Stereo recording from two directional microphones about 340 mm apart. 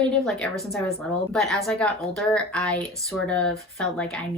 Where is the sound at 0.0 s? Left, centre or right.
Centre.